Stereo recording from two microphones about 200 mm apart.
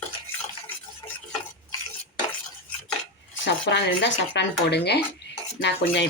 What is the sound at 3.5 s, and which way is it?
Speech, 60° left (ahead or behind).